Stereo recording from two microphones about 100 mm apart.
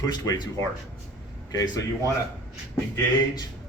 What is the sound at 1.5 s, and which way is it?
Speech, 35° left (ahead or behind).